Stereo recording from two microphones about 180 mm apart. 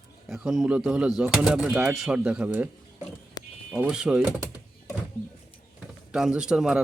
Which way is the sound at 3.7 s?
5° right (ahead or behind).